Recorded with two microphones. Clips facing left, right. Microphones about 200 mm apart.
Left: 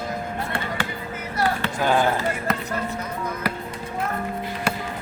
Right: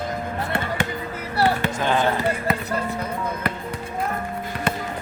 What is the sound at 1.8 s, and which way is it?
Basketball bounce, 10° left (ahead or behind).